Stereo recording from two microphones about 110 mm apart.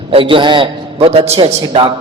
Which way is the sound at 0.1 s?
55° right (ahead or behind).